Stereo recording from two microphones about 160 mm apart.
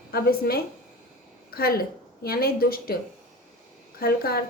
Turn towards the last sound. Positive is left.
turn(degrees=70)  # may be behind; listen again after turning